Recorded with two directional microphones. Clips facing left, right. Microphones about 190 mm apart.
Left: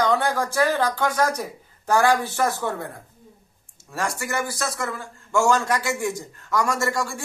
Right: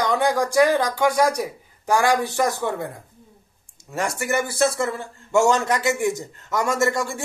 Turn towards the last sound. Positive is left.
turn(degrees=-20)  # may be behind; listen again after turning